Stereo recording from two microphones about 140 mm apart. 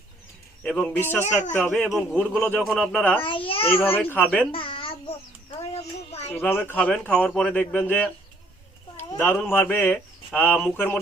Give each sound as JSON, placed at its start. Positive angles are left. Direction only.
{"t": 0.6, "sound": "a man's voice", "side_deg": 10}
{"t": 1.6, "sound": "a man's voice", "side_deg": 5}
{"t": 2.6, "sound": "a man's voice", "side_deg": 0}
{"t": 3.0, "sound": "a man's voice", "side_deg": 10}
{"t": 3.2, "sound": "a child's voice", "side_deg": 40}
{"t": 3.8, "sound": "a man's voice", "side_deg": 15}
{"t": 4.5, "sound": "babbling", "side_deg": 40}
{"t": 6.3, "sound": "a man's voice", "side_deg": 15}